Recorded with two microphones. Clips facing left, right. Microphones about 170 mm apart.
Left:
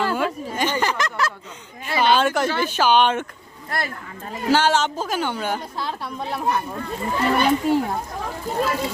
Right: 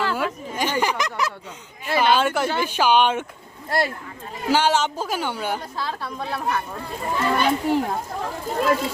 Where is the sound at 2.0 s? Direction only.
5° right (ahead or behind).